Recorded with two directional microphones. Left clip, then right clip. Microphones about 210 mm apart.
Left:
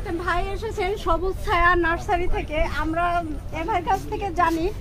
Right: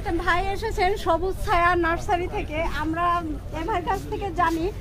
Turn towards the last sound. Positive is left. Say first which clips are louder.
# left 2 dB
turn(degrees=15)  # may be behind; listen again after turning